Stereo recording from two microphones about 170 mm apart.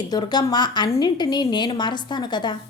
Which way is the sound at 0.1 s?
25° left (ahead or behind).